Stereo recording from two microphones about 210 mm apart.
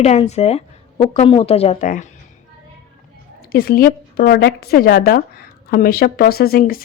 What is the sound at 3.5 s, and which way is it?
Speech, 45° left (ahead or behind).